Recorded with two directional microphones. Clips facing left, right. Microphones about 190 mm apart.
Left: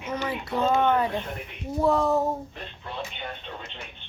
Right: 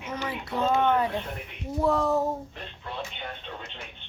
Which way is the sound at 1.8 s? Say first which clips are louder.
Left 2 dB; 20° left (ahead or behind).